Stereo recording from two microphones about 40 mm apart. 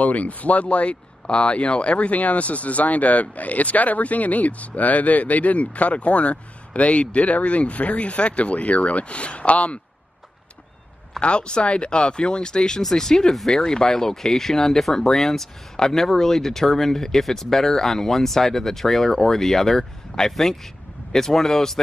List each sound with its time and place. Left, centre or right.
0.0 s speech: left
11.1 s speech: left; by 21.7 s centre